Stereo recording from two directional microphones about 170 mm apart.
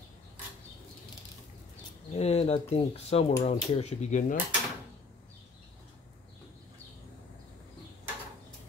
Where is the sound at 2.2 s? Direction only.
35° left (ahead or behind).